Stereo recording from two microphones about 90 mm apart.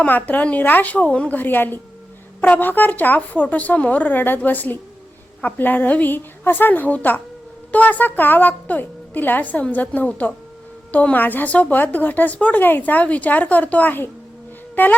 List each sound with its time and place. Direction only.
0.0 s a woman's voice: 15° left (ahead or behind)